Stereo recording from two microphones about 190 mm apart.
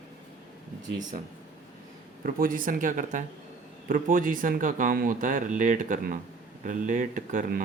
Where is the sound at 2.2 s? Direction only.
45° right (ahead or behind).